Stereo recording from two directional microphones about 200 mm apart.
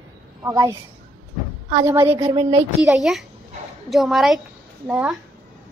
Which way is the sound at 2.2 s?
30° right (ahead or behind).